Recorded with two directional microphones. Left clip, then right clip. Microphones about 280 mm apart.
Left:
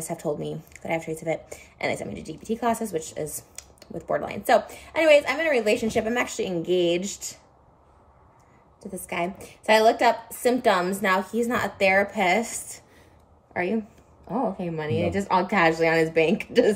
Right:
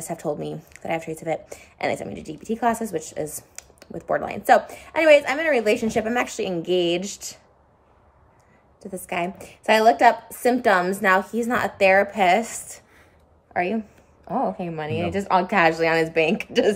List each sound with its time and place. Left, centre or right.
0.0 s a woman's voice: centre
8.9 s a woman's voice: right
13.5 s a sound: centre
14.2 s speech: centre